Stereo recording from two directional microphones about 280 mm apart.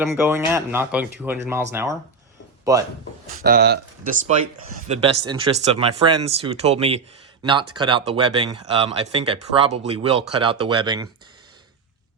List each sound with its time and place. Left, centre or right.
0.0 s speech: centre
3.4 s speech: right; by 11.1 s centre